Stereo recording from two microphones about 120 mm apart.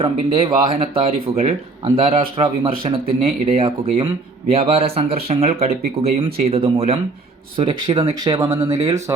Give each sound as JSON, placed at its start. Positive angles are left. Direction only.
{"t": 0.0, "sound": "speech", "side_deg": -50}
{"t": 7.5, "sound": "speech", "side_deg": -45}